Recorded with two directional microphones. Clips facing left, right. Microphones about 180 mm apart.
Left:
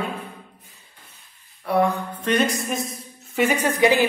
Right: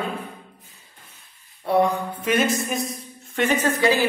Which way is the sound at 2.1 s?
5° right (ahead or behind).